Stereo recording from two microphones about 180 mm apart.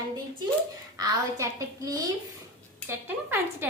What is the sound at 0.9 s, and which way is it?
A woman's voice, 20° right (ahead or behind).